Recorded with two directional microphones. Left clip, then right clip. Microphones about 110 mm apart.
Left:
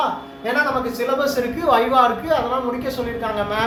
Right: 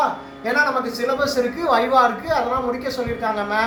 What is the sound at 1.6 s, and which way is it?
A woman's voice, 25° left (ahead or behind).